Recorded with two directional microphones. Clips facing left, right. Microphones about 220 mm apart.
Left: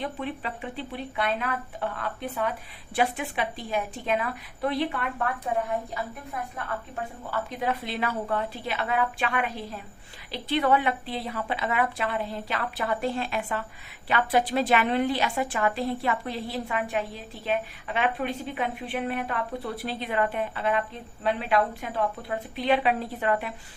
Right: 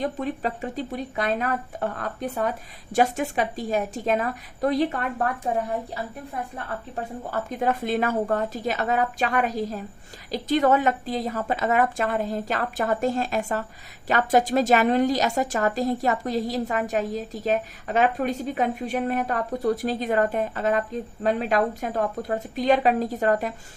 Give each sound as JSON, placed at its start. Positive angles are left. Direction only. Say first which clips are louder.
{"t": 0.0, "sound": "a woman's voice", "louder": "right 5 dB", "side_deg": -40}
{"t": 6.9, "sound": "a woman's voice", "louder": "right 5 dB", "side_deg": -45}